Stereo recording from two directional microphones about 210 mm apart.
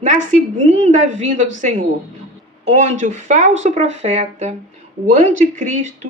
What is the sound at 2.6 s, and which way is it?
A woman's voice, 35° right (ahead or behind).